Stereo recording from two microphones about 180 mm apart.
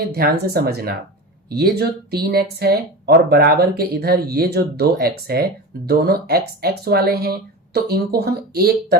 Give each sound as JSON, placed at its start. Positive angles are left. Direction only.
{"t": 0.1, "sound": "speech", "side_deg": -60}